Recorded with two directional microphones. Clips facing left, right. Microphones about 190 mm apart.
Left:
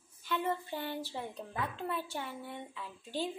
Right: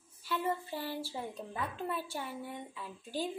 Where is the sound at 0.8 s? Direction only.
10° right (ahead or behind).